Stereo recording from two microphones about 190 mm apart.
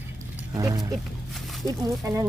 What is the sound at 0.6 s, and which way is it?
Speech, 15° right (ahead or behind).